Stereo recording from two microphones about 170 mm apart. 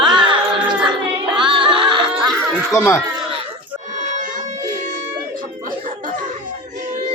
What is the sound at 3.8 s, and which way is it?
Music, 45° right (ahead or behind).